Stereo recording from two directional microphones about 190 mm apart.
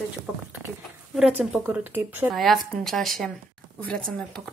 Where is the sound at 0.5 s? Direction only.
5° right (ahead or behind).